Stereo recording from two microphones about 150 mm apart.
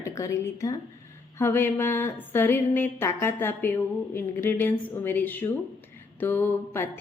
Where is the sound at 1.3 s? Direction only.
15° left (ahead or behind).